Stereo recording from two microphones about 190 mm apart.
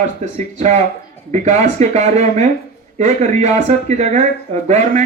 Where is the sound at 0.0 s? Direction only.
35° right (ahead or behind).